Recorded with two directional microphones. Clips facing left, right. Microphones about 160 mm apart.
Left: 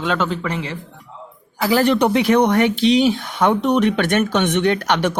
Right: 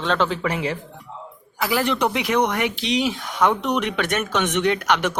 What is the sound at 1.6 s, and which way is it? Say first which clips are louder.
Speech: left 6 dB; 30° left (ahead or behind).